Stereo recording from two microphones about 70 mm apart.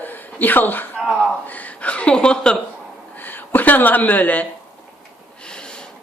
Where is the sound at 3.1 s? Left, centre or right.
Left.